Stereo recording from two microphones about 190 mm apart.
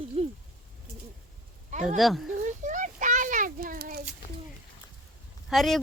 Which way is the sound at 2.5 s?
40° right (ahead or behind).